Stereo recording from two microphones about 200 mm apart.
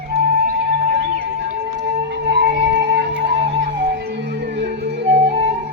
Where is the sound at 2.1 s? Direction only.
60° right (ahead or behind).